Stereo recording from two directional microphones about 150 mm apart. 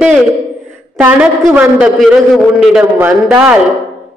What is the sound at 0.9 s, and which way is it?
A man's voice, 10° right (ahead or behind).